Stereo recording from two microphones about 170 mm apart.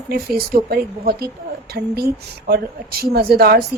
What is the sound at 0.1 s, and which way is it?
A woman's voice, 65° right (ahead or behind).